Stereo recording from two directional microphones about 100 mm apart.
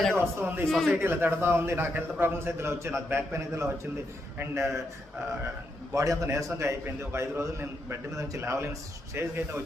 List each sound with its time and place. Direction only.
0.3 s a man's voice: 25° right (ahead or behind)
0.7 s a man's voice: 5° left (ahead or behind)
0.9 s a man's voice: 20° right (ahead or behind)
5.9 s a man's voice: 30° right (ahead or behind)